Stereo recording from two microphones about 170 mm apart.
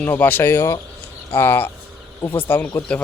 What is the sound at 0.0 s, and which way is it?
Speech, 10° left (ahead or behind).